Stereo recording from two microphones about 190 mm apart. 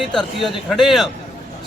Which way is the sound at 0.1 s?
Centre (ahead or behind).